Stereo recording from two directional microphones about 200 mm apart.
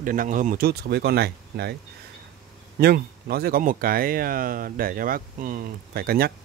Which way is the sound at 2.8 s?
50° right (ahead or behind).